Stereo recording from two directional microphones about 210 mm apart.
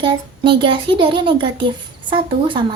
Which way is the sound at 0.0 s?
25° right (ahead or behind).